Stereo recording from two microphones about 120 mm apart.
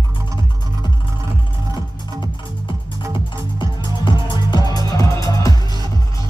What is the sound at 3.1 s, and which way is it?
Music, 40° left (ahead or behind).